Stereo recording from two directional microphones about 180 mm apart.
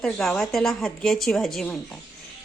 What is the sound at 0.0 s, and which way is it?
A woman's voice, centre (ahead or behind).